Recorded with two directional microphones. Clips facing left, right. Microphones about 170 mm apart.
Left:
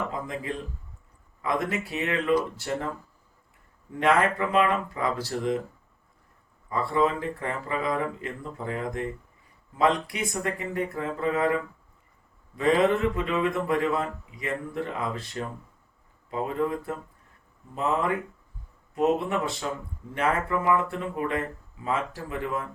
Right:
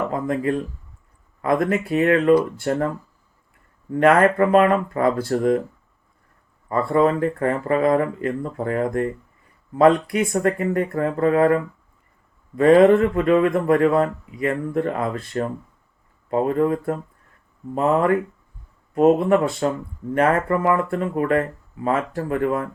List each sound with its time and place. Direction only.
0.1 s a sound: 55° right (ahead or behind)
1.4 s a man's voice: 55° right (ahead or behind)
4.0 s a man's voice: 50° right (ahead or behind)
6.7 s a man's voice: 55° right (ahead or behind)